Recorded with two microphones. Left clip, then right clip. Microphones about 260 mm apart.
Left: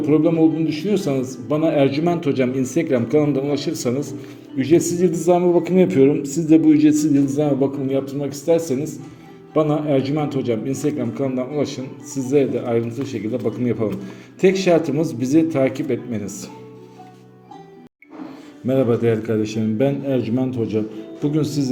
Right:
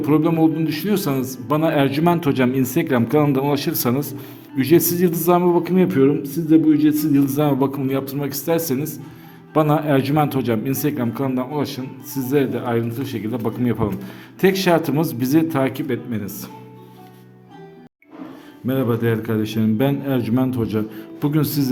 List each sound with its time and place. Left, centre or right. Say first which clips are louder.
0.0 s a man's voice: left 1 dB; right
18.6 s a man's voice: left 3 dB; centre